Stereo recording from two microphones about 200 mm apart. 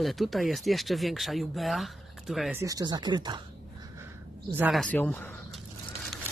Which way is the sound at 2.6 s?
20° right (ahead or behind).